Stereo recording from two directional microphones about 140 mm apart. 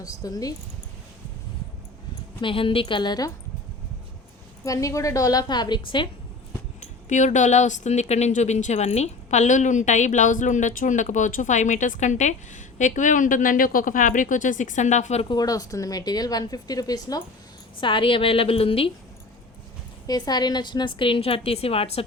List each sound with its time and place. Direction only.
0.0 s speech: 25° left (ahead or behind)
2.4 s a woman's voice: 40° left (ahead or behind)
4.6 s speech: 25° left (ahead or behind)
6.7 s speech: 60° left (ahead or behind)
15.3 s a woman's voice: 25° left (ahead or behind); by 18.9 s 45° left (ahead or behind)
20.1 s a woman's voice: 30° left (ahead or behind); by 22.0 s 45° left (ahead or behind)